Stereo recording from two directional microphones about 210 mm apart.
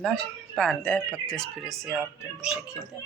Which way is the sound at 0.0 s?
5° left (ahead or behind).